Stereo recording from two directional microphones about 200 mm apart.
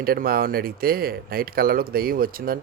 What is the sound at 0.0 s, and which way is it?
Speech, 50° right (ahead or behind).